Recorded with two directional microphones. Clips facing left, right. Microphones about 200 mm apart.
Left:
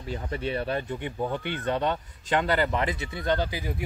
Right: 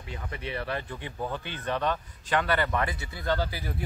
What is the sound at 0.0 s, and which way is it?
Speech, 30° left (ahead or behind).